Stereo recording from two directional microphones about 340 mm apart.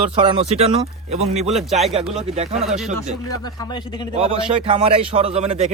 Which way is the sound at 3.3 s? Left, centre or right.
Centre.